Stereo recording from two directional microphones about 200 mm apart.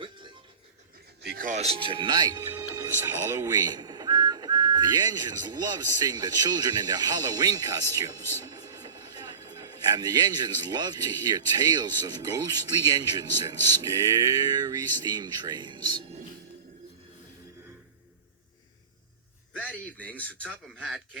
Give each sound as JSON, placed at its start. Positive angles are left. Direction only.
{"t": 0.0, "sound": "music", "side_deg": -25}
{"t": 1.2, "sound": "a man's voice", "side_deg": -50}
{"t": 19.5, "sound": "a sound", "side_deg": 5}